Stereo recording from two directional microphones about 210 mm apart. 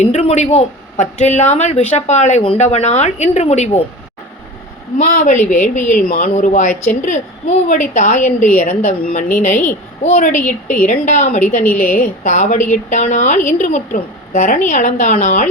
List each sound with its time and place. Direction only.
0.0 s speech: 30° left (ahead or behind)
4.9 s speech: 35° left (ahead or behind)